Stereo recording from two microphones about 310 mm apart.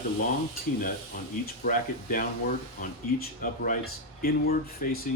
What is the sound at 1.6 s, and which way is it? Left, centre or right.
Speech, left.